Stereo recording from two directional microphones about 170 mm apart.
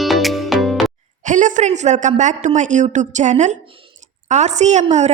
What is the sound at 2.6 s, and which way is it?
Speech, 45° right (ahead or behind).